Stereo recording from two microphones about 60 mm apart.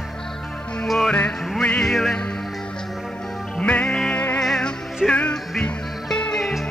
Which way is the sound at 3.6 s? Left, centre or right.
Left.